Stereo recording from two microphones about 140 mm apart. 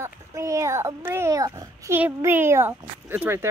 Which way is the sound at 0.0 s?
20° right (ahead or behind).